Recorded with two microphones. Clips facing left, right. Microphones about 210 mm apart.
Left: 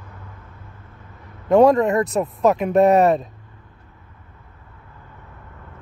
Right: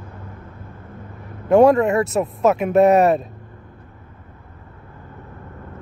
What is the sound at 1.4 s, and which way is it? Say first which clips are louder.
Speech: right 1 dB; 5° right (ahead or behind).